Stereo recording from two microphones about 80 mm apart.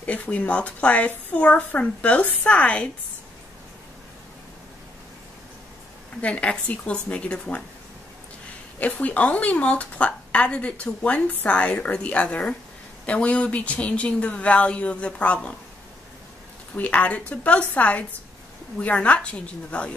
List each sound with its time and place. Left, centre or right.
0.0 s a woman's voice: centre
6.2 s a woman's voice: centre
8.7 s a woman's voice: centre
16.7 s a woman's voice: centre